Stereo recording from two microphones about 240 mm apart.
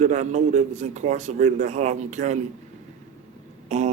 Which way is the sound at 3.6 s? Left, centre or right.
Right.